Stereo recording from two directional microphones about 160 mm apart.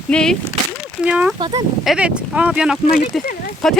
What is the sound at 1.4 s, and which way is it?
Speech, 25° right (ahead or behind).